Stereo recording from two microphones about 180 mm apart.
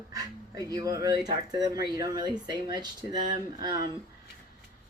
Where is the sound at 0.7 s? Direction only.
20° right (ahead or behind).